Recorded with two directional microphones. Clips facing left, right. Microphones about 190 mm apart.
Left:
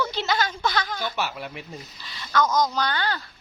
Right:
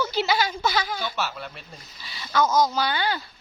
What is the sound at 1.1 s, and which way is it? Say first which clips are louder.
Speech: left 1 dB; 15° left (ahead or behind).